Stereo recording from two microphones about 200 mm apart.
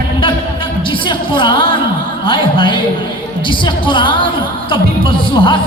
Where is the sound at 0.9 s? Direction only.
25° left (ahead or behind).